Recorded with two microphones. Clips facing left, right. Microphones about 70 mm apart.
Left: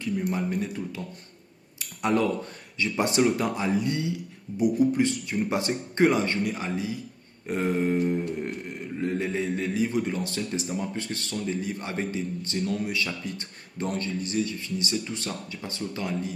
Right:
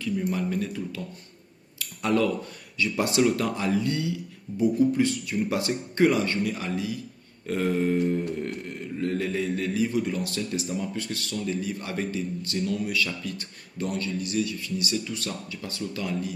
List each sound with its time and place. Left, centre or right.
0.0 s a man's voice: left
1.8 s a sound: left
2.7 s a man's voice: left